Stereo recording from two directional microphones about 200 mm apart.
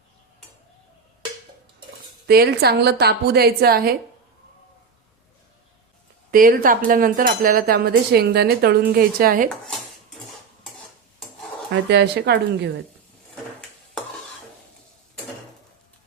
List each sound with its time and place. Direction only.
2.2 s speech: 50° right (ahead or behind)
6.3 s speech: 45° right (ahead or behind)
11.7 s speech: 60° right (ahead or behind)